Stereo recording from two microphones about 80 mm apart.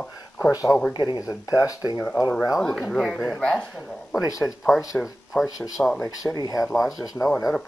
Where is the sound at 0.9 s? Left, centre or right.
Left.